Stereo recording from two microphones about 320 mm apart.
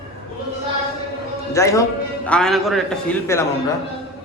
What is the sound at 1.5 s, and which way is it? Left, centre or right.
A man's voice, centre.